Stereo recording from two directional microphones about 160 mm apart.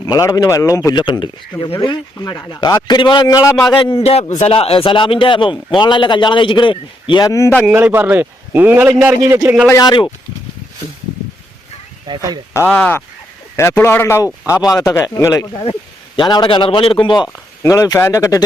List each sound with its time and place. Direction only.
0.0 s speech: 20° left (ahead or behind)
4.0 s speech: 45° left (ahead or behind)
7.3 s a man's voice: 20° left (ahead or behind)
7.6 s a man's voice: 10° right (ahead or behind)
9.6 s speech: 25° left (ahead or behind)
12.0 s speech: 25° right (ahead or behind)
12.5 s a man's voice: 10° left (ahead or behind); by 17.2 s 30° left (ahead or behind)
17.3 s speech: 20° left (ahead or behind)